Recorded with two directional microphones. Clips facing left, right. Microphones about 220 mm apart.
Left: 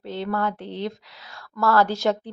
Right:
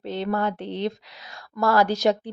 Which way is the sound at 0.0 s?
20° right (ahead or behind).